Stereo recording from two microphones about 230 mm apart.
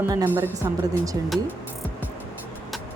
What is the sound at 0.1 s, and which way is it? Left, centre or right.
Speech, centre.